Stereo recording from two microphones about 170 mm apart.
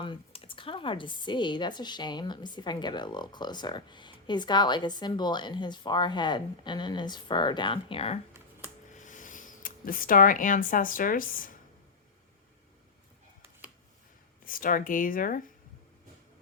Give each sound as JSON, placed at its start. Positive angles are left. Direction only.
{"t": 0.0, "sound": "speech", "side_deg": 30}
{"t": 8.9, "sound": "speech", "side_deg": 45}
{"t": 14.4, "sound": "speech", "side_deg": 55}